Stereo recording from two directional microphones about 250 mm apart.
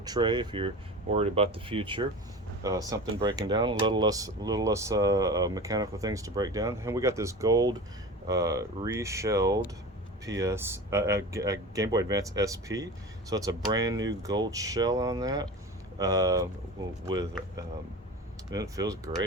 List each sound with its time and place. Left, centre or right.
0.0 s speech: centre
18.5 s speech: centre